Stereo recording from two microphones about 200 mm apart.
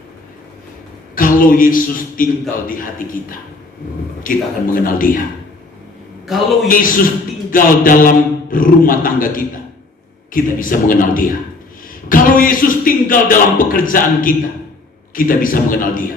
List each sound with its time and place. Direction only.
1.1 s speech: 45° left (ahead or behind)
4.2 s a man's voice: 45° left (ahead or behind)
6.2 s a man's voice: centre (ahead or behind)
6.7 s a man's voice: 45° left (ahead or behind)